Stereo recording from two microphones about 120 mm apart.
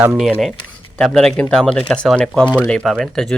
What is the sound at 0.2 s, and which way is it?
Speech, centre (ahead or behind).